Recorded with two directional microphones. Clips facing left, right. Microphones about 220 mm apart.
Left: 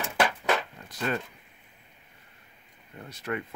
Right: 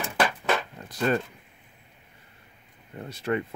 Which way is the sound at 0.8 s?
35° right (ahead or behind).